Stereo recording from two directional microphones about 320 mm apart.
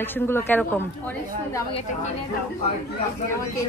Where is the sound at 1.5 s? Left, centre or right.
Centre.